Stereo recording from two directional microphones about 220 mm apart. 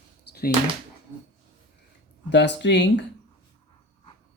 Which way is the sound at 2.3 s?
55° left (ahead or behind).